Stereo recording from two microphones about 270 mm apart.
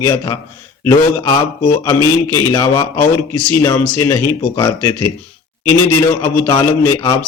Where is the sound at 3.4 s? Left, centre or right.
Centre.